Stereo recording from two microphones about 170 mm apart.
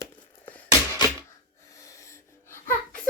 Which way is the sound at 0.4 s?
10° left (ahead or behind).